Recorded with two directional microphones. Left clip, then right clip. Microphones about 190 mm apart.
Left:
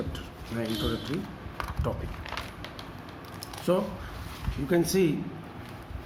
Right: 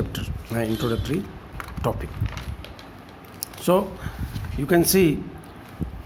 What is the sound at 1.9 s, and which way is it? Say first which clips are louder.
Speech: right 8 dB; 60° right (ahead or behind).